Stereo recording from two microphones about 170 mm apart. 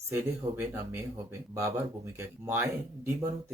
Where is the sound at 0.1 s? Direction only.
15° right (ahead or behind).